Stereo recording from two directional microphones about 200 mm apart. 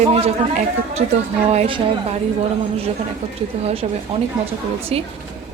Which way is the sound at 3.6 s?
30° right (ahead or behind).